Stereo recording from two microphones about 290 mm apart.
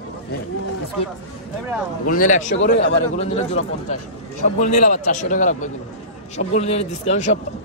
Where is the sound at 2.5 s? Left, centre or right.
Left.